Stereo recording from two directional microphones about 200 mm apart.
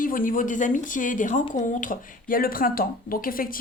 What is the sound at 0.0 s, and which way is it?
Speech, 45° left (ahead or behind).